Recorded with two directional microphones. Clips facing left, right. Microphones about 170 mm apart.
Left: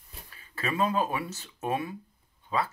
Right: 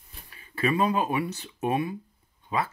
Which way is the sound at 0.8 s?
15° right (ahead or behind).